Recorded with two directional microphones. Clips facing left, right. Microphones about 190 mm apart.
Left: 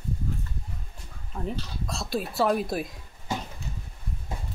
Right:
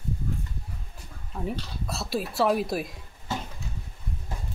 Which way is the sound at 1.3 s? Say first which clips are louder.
Right 1 dB; 5° right (ahead or behind).